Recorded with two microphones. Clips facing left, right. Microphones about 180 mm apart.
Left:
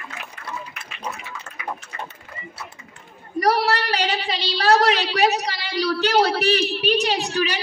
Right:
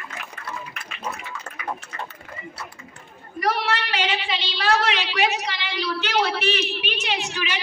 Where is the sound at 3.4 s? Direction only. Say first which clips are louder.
Left 4 dB; 40° left (ahead or behind).